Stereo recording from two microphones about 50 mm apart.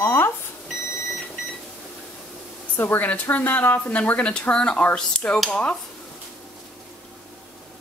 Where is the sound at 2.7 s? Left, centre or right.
Left.